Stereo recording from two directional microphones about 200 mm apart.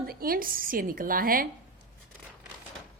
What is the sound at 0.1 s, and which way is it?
A woman's voice, 45° right (ahead or behind).